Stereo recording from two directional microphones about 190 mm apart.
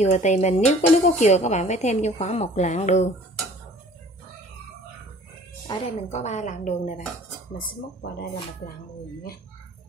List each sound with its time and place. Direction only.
0.0 s speech: 35° left (ahead or behind)
5.7 s speech: 35° left (ahead or behind)
7.5 s speech: 50° left (ahead or behind)